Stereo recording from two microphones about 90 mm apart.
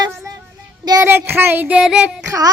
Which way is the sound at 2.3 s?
40° right (ahead or behind).